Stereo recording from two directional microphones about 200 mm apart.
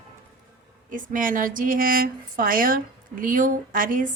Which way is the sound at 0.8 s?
40° right (ahead or behind).